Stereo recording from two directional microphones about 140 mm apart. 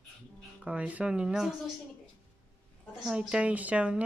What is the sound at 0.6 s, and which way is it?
Speech, 10° right (ahead or behind).